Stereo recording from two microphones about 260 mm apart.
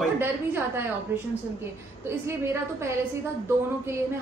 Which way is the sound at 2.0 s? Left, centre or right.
Centre.